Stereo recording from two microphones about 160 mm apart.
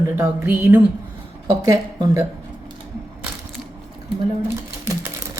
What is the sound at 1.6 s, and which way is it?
Speech, 20° right (ahead or behind).